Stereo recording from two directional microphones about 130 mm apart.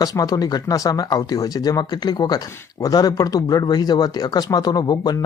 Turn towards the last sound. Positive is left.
turn(degrees=30)  # may be behind; listen again after turning